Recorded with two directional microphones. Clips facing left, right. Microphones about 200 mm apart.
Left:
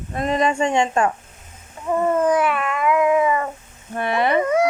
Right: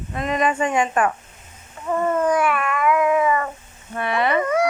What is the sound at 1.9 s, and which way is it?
Cat, 15° left (ahead or behind).